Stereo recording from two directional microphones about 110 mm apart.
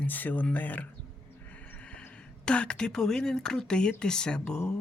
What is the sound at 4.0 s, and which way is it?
Speech, 5° left (ahead or behind).